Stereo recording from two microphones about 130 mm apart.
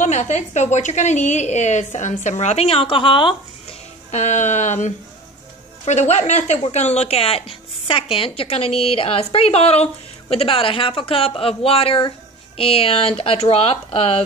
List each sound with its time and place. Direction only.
0.0 s a woman's voice: 65° left (ahead or behind); by 3.3 s 40° left (ahead or behind)
4.1 s a woman's voice: 65° left (ahead or behind)